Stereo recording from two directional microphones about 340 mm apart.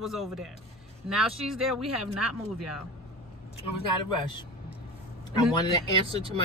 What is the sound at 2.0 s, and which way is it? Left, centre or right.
Speech, right.